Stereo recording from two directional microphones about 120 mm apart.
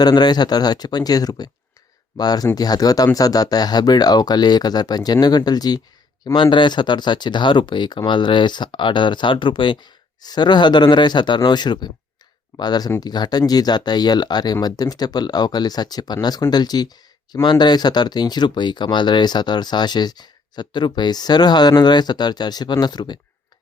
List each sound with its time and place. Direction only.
0.0 s speech: 35° left (ahead or behind)